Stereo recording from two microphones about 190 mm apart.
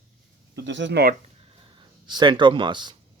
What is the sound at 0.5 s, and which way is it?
Speech, 70° right (ahead or behind).